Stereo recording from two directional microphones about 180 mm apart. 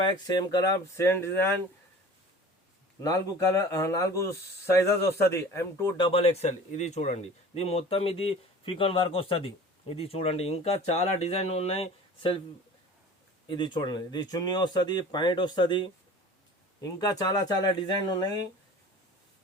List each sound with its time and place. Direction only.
0.0 s speech: 25° left (ahead or behind)
3.0 s speech: 20° left (ahead or behind)
13.5 s speech: 25° left (ahead or behind)